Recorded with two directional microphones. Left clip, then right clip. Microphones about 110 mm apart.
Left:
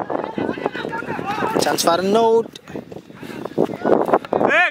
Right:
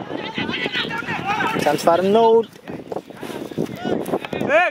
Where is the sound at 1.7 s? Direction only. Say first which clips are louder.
Right 2 dB; 45° left (ahead or behind).